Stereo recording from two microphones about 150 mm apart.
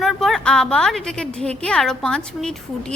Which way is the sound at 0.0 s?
Centre (ahead or behind).